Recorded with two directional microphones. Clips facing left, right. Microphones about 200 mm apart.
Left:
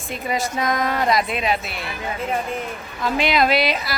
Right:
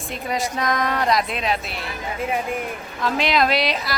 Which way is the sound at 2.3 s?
10° right (ahead or behind).